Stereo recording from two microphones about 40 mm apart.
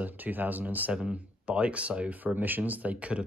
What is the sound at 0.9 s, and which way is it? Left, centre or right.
Speech, right.